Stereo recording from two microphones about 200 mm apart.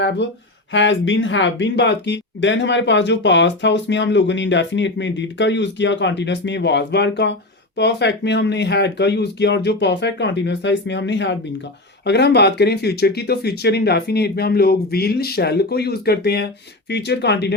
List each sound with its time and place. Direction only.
0.7 s speech: 70° left (ahead or behind)